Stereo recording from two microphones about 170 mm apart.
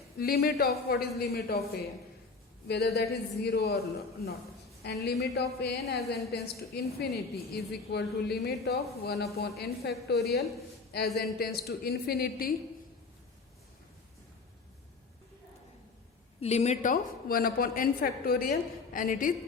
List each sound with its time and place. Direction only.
0.2 s speech: 65° left (ahead or behind)
4.8 s speech: 75° left (ahead or behind)
16.4 s a woman's voice: 40° left (ahead or behind)